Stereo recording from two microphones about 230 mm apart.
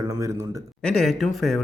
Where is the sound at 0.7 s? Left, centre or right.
Centre.